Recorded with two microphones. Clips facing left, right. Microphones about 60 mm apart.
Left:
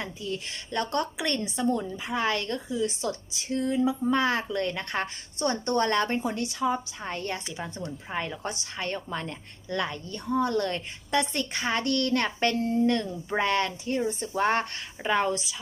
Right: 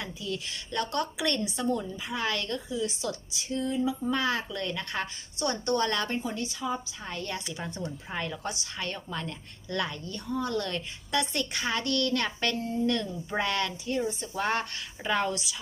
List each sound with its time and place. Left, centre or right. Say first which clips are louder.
0.0 s a woman's voice: left 2 dB; left
3.5 s a woman's voice: left 3 dB; left
4.1 s a woman's voice: left 4 dB; left
6.2 s a woman's voice: left 5 dB; left
7.0 s a woman's voice: left 3 dB; left